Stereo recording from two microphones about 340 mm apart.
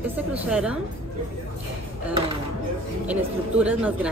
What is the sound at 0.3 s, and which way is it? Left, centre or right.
Speech, centre.